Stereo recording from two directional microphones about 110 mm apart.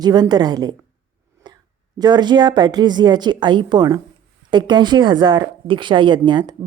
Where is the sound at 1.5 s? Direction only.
40° right (ahead or behind).